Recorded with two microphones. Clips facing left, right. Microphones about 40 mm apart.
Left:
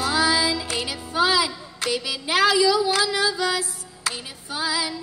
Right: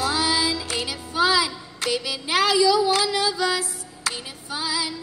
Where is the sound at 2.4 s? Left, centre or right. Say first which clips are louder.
Even; left.